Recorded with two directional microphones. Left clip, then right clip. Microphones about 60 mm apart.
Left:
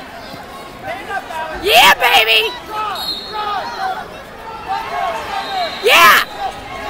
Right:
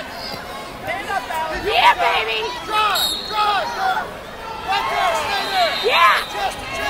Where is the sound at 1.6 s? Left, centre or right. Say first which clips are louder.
Left 6 dB; left.